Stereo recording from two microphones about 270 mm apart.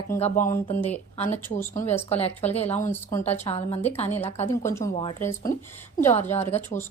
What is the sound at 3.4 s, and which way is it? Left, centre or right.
A woman's voice, left.